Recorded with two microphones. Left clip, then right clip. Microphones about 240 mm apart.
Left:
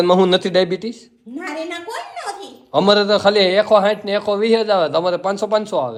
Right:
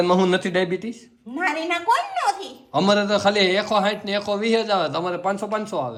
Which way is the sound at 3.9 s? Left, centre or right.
Centre.